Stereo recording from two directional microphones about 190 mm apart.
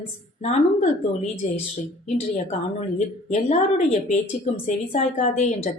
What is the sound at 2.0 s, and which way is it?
A woman's voice, 35° left (ahead or behind).